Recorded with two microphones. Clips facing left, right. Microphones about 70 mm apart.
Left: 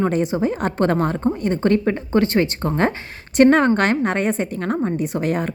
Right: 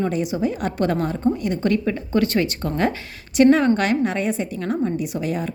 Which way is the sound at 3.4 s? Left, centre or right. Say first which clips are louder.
Left 1 dB; left.